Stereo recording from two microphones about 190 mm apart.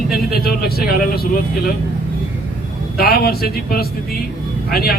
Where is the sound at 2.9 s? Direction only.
55° left (ahead or behind).